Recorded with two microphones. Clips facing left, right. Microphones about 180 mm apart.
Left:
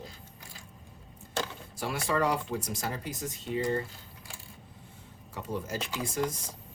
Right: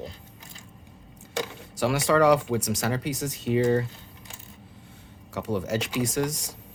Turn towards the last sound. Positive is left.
turn(degrees=-80)